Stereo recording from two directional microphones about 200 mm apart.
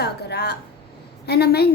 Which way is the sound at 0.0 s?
55° left (ahead or behind).